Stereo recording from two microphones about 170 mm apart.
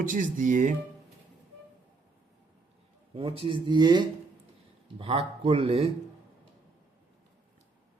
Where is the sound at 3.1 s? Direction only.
30° right (ahead or behind).